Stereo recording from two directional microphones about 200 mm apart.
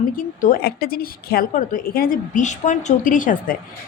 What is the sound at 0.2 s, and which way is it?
Speech, 40° left (ahead or behind).